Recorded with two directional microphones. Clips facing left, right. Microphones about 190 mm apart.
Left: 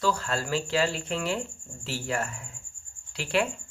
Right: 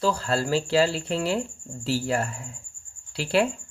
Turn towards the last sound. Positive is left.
turn(degrees=-35)  # may be behind; listen again after turning